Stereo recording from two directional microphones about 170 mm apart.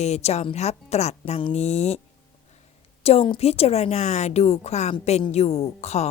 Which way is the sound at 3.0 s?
35° left (ahead or behind).